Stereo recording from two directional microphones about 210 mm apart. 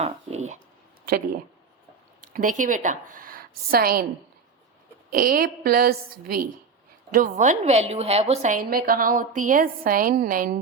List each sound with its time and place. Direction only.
0.0 s speech: 30° right (ahead or behind)
2.2 s a woman's voice: 40° right (ahead or behind)
5.1 s a woman's voice: 45° right (ahead or behind)